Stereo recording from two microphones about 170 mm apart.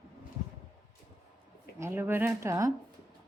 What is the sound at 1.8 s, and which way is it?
Speech, 15° right (ahead or behind).